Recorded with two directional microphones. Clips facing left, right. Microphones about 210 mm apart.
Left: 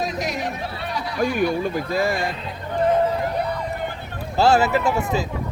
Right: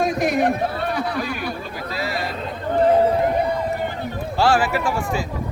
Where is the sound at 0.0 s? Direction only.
55° right (ahead or behind).